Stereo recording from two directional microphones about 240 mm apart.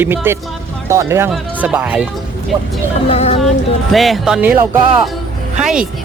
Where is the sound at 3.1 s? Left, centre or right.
Left.